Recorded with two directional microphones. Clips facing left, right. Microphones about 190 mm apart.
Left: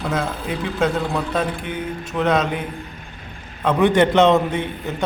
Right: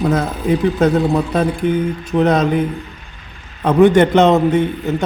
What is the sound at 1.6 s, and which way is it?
Speech, 40° right (ahead or behind).